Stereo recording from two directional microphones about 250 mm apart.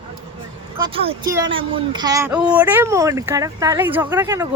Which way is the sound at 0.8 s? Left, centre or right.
Centre.